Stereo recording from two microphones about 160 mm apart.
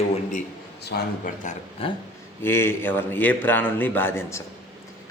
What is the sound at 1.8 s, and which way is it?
Speech, 35° left (ahead or behind).